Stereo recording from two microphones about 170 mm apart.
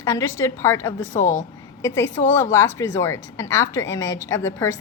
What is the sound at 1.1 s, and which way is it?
Speech, 50° left (ahead or behind).